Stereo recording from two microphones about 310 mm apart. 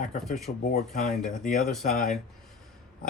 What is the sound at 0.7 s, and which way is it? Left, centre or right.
Speech, left.